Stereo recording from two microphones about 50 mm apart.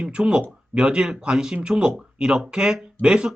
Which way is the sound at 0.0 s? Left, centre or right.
Right.